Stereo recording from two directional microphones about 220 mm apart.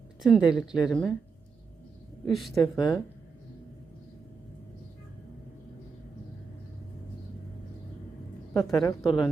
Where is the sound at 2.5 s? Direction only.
15° left (ahead or behind).